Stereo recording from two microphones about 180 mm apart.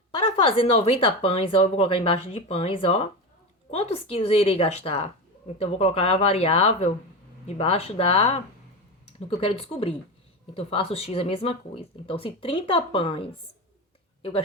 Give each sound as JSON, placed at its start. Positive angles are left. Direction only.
{"t": 0.2, "sound": "speech", "side_deg": 30}